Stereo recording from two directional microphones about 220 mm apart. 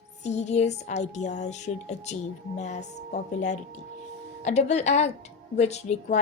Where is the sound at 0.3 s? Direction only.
30° left (ahead or behind).